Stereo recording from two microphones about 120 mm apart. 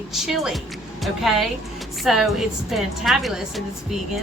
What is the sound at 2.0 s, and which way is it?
A woman's voice, centre (ahead or behind).